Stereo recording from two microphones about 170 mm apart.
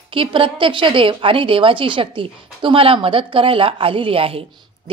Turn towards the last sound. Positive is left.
turn(degrees=-35)  # may be behind; listen again after turning